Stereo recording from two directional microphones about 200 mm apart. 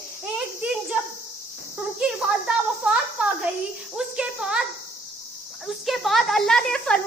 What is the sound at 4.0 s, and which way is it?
Insect, 5° right (ahead or behind).